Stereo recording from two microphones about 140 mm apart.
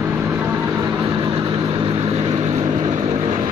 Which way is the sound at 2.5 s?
30° right (ahead or behind).